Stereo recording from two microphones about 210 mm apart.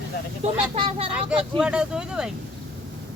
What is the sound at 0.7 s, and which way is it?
Speech, 25° right (ahead or behind).